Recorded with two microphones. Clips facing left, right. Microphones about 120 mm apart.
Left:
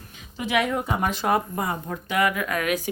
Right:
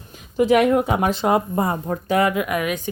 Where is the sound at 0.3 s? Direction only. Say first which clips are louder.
Right 9 dB; 45° right (ahead or behind); by 0.9 s 65° right (ahead or behind).